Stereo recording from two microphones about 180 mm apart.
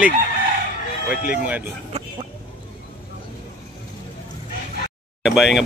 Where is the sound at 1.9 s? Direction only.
35° right (ahead or behind).